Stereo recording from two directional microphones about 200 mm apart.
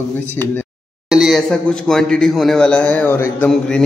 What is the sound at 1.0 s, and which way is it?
Speech, centre (ahead or behind).